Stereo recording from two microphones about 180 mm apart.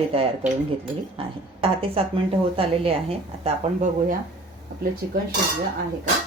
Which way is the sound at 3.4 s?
45° right (ahead or behind).